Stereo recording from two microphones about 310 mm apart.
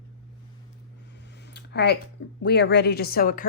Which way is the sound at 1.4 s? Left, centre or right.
Left.